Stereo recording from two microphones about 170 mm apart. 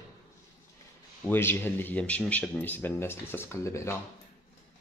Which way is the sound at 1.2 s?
10° left (ahead or behind).